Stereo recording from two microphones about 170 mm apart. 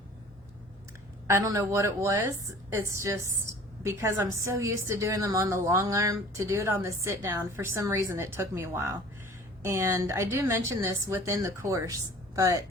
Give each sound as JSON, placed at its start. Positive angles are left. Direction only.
{"t": 1.3, "sound": "a woman's voice", "side_deg": -20}